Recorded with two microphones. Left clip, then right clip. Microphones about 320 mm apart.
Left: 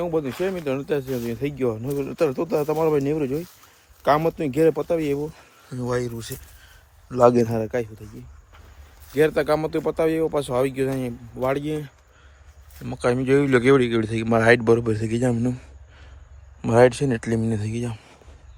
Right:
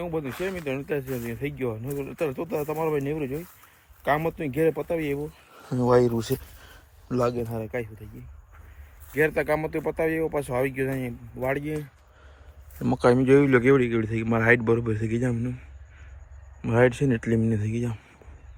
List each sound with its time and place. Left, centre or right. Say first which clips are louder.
0.0 s speech: left 6 dB; centre
5.7 s a sound: right 6 dB; centre
7.4 s speech: left 8 dB; left
9.1 s speech: left 4 dB; centre
12.8 s speech: right 2 dB; centre
16.6 s speech: left 5 dB; centre